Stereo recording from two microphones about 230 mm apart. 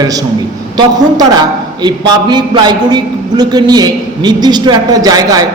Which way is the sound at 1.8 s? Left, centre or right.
Centre.